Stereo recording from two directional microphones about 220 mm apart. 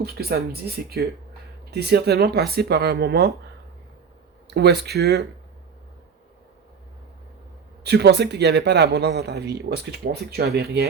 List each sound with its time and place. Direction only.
0.0 s speech: 45° right (ahead or behind)
4.4 s speech: 50° right (ahead or behind)
7.9 s speech: 50° right (ahead or behind)